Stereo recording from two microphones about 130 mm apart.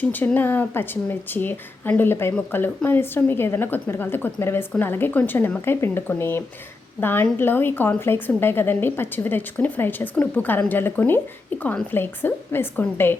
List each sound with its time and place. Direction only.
0.0 s a woman's voice: 15° left (ahead or behind)